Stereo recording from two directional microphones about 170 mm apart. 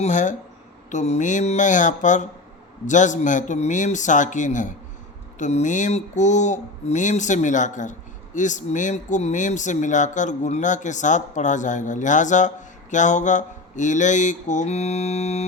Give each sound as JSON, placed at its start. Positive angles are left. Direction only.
{"t": 0.0, "sound": "speech", "side_deg": 45}